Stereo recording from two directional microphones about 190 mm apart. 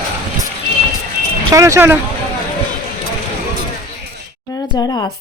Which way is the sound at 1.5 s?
15° right (ahead or behind).